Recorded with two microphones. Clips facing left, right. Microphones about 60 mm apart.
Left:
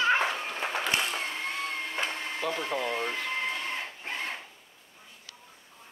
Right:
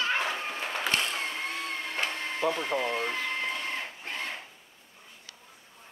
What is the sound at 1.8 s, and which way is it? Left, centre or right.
Music, centre.